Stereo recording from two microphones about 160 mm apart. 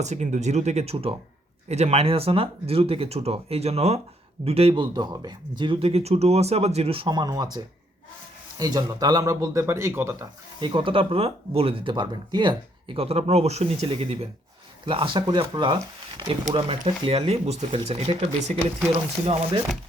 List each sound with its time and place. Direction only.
0.0 s speech: 45° right (ahead or behind); by 10.2 s 15° right (ahead or behind)
10.6 s speech: 30° right (ahead or behind)